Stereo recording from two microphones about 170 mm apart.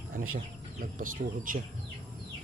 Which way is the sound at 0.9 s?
55° right (ahead or behind).